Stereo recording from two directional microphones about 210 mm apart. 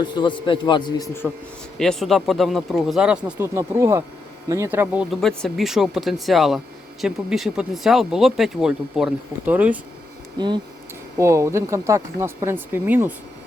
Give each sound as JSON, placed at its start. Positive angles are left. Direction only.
{"t": 0.0, "sound": "a man's voice", "side_deg": 20}
{"t": 1.8, "sound": "speech", "side_deg": 0}
{"t": 5.2, "sound": "speech", "side_deg": 0}
{"t": 10.3, "sound": "speech", "side_deg": -20}